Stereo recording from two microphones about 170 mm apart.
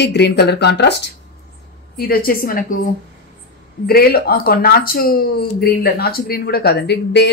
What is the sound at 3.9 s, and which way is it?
Speech, 65° left (ahead or behind).